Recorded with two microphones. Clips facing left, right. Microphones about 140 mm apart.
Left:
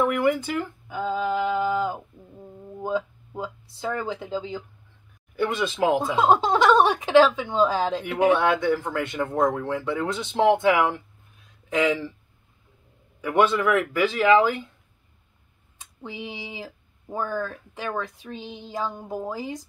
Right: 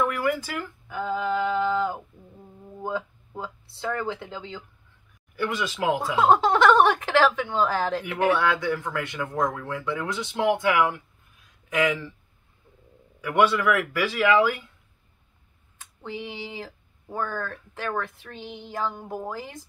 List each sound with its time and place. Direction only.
0.0 s speech: 20° left (ahead or behind)
13.2 s speech: 25° left (ahead or behind)
16.0 s speech: 15° left (ahead or behind)